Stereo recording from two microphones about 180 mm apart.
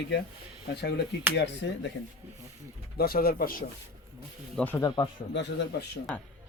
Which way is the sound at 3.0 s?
55° left (ahead or behind).